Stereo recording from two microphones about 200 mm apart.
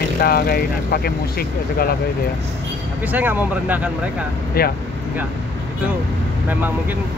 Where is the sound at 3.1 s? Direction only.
10° right (ahead or behind).